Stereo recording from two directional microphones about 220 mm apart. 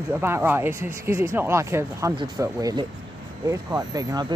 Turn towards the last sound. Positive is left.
turn(degrees=-15)  # may be behind; listen again after turning